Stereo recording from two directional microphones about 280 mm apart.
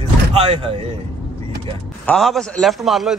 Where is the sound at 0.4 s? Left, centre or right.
Right.